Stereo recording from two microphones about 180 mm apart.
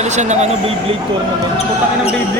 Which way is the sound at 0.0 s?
40° right (ahead or behind).